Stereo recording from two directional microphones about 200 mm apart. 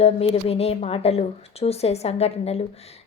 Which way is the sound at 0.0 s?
30° left (ahead or behind).